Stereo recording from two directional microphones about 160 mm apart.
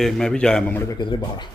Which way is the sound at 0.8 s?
20° left (ahead or behind).